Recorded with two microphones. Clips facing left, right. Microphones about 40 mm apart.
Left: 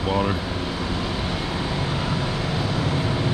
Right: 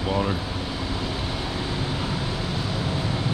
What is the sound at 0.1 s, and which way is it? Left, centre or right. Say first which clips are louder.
Speech: left 2 dB; centre.